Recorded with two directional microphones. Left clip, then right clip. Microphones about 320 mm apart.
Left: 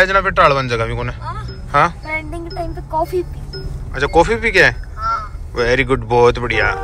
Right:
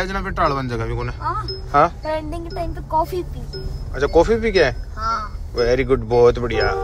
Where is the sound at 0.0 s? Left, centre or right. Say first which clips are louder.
Left 9 dB; centre; by 3.1 s right.